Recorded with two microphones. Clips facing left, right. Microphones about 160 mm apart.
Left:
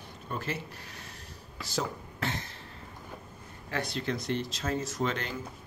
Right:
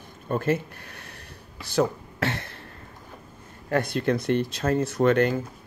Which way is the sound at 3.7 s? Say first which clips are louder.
Right 9 dB; 55° right (ahead or behind).